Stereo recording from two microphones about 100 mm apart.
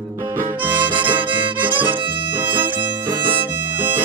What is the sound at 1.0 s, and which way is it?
Music, 55° right (ahead or behind).